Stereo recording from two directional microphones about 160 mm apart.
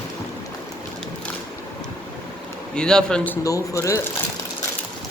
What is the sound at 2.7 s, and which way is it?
Speech, 5° left (ahead or behind).